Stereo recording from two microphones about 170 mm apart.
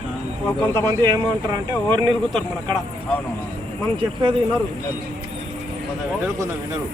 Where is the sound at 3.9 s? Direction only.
30° right (ahead or behind).